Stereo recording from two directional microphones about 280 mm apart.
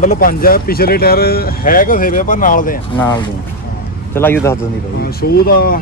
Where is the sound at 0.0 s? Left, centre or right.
Left.